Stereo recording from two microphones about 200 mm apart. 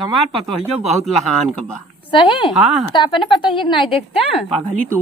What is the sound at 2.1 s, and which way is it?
A woman's voice, 25° left (ahead or behind).